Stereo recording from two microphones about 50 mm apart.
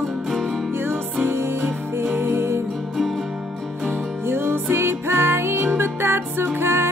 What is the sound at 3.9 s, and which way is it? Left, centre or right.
Music, right.